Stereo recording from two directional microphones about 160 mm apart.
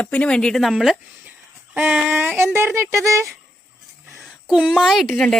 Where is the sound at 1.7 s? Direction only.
10° right (ahead or behind).